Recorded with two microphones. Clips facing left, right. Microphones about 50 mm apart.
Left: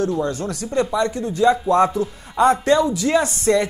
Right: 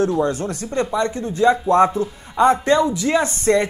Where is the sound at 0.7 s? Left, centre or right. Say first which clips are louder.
Left 1 dB; centre.